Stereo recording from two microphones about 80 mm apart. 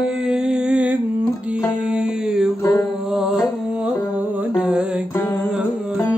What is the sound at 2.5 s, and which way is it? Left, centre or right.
Music, left.